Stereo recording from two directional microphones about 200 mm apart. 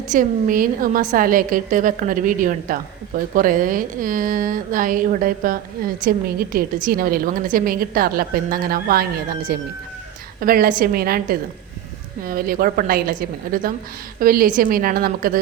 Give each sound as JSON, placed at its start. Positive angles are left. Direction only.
{"t": 0.1, "sound": "a woman's voice", "side_deg": -45}